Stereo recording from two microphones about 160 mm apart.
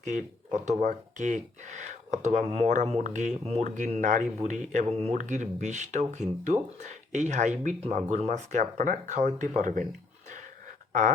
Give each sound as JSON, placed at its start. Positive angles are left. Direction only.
{"t": 0.0, "sound": "speech", "side_deg": -50}